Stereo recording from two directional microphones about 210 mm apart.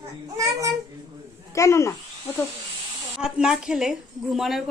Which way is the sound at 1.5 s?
15° left (ahead or behind).